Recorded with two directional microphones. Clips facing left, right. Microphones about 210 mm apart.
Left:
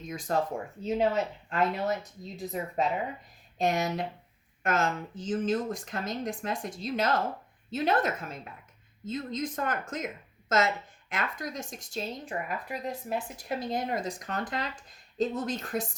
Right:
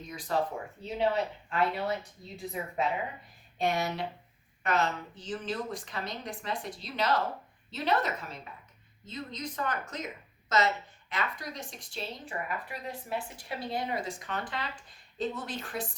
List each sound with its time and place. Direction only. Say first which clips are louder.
0.1 s a woman's voice: left 2 dB; 45° left (ahead or behind)
11.1 s a woman's voice: left 2 dB; 50° left (ahead or behind)